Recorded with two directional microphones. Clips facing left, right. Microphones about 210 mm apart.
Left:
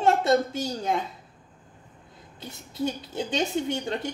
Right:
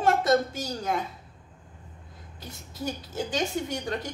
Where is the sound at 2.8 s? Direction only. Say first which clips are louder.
Left 3 dB; 25° left (ahead or behind).